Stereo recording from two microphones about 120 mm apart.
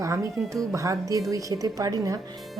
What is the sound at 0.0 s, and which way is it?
Speech, 25° right (ahead or behind).